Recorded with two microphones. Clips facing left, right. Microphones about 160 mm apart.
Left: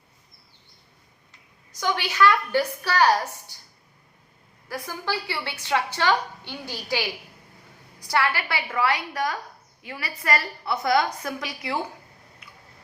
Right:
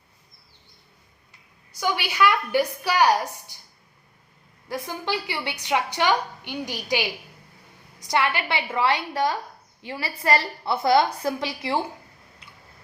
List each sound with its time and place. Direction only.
1.7 s a woman's voice: 10° right (ahead or behind)
4.7 s a woman's voice: 20° right (ahead or behind)